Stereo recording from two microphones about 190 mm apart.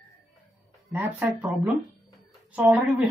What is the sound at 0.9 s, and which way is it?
Speech, 10° right (ahead or behind).